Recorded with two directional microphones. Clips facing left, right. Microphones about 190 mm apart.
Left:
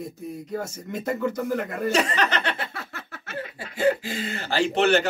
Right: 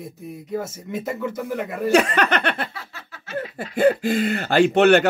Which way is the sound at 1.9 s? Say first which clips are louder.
Right 7 dB; 60° right (ahead or behind).